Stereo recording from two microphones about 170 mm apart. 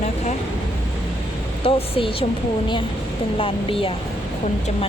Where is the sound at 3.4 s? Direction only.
30° left (ahead or behind).